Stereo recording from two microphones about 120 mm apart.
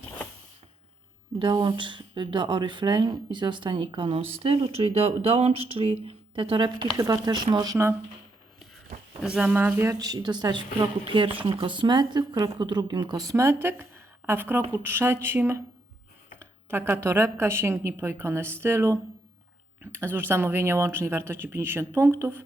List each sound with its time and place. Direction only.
1.4 s speech: 40° right (ahead or behind)
6.9 s a woman's voice: 30° right (ahead or behind)
9.2 s a woman's voice: 10° right (ahead or behind)